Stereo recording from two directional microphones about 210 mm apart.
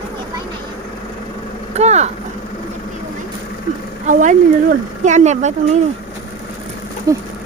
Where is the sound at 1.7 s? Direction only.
30° right (ahead or behind).